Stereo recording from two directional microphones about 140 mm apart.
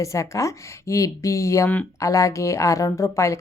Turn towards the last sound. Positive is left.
turn(degrees=20)  # may be behind; listen again after turning